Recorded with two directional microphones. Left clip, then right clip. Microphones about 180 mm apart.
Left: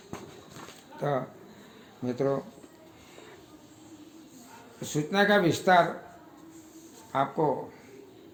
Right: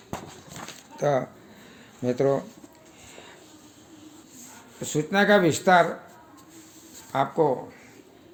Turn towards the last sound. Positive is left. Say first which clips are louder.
# right 3 dB
turn(degrees=-45)  # may be behind; listen again after turning